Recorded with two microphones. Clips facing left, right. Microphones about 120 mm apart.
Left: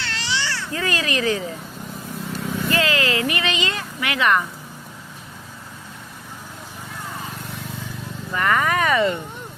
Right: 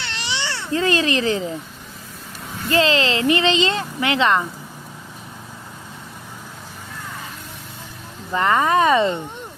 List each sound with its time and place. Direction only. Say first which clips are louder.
0.0 s cat: left 1 dB; 20° right (ahead or behind)
2.6 s speech: right 4 dB; 25° right (ahead or behind)
8.3 s speech: right 3 dB; 25° right (ahead or behind)